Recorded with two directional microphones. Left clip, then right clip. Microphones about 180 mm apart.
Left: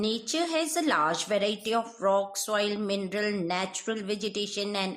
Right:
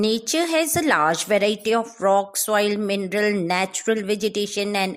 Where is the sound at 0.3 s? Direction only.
40° right (ahead or behind).